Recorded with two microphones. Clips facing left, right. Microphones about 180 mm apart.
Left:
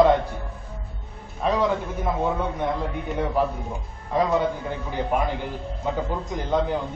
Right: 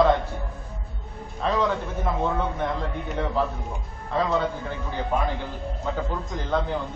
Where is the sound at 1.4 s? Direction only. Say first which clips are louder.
Left 2 dB; 10° left (ahead or behind).